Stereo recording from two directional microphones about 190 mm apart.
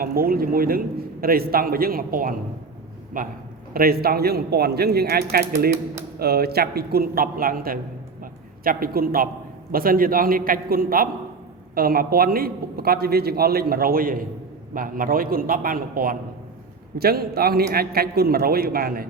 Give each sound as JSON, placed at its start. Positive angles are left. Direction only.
{"t": 0.0, "sound": "a man's voice", "side_deg": -50}
{"t": 8.2, "sound": "a sound", "side_deg": -50}
{"t": 9.7, "sound": "a man's voice", "side_deg": -50}